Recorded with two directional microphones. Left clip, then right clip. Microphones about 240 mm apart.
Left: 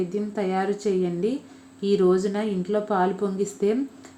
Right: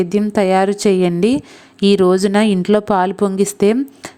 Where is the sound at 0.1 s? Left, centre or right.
Right.